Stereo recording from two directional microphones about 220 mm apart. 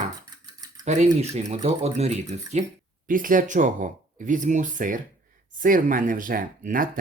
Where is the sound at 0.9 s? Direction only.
30° right (ahead or behind).